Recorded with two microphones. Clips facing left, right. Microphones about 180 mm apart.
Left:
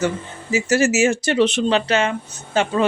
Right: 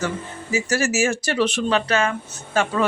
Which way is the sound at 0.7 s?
20° left (ahead or behind).